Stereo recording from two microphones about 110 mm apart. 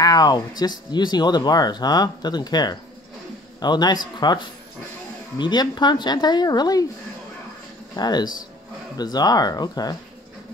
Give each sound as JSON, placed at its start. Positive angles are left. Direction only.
{"t": 0.0, "sound": "speech", "side_deg": 35}
{"t": 7.9, "sound": "speech", "side_deg": 40}